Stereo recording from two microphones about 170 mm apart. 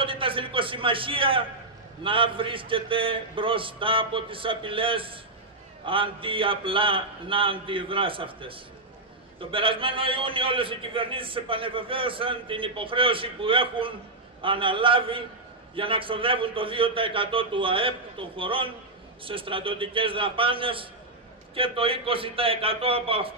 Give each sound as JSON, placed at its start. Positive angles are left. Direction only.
{"t": 0.0, "sound": "a man's voice", "side_deg": -30}